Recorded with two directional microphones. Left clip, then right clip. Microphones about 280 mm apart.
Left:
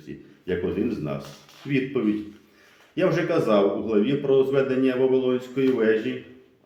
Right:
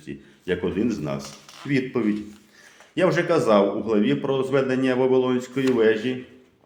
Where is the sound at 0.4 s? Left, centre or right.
Right.